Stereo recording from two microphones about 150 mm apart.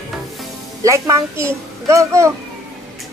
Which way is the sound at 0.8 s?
20° right (ahead or behind).